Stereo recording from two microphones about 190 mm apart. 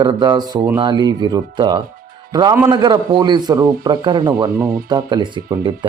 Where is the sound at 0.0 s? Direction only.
20° right (ahead or behind).